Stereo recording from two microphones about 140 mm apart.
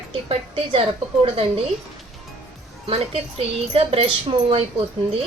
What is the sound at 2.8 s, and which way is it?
A woman's voice, 45° right (ahead or behind).